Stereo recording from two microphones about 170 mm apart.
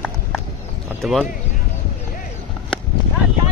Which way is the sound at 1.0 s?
Centre (ahead or behind).